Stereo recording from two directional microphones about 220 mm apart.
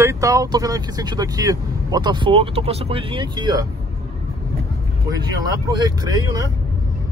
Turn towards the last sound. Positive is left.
turn(degrees=-15)  # may be behind; listen again after turning